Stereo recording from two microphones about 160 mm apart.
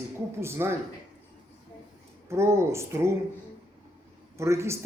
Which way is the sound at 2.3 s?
15° right (ahead or behind).